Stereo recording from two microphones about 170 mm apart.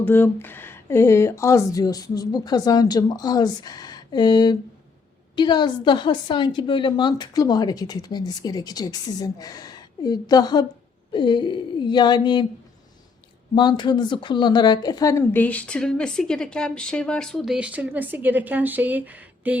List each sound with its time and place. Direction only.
0.0 s speech: 10° left (ahead or behind)
13.6 s speech: 25° left (ahead or behind); by 19.5 s 10° right (ahead or behind)